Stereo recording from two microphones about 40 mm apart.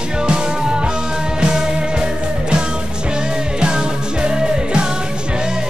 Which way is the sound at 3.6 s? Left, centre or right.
Right.